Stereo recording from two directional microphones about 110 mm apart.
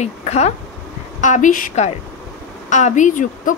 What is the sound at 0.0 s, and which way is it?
Speech, 85° left.